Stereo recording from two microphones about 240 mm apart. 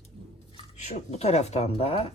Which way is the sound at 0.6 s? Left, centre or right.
Left.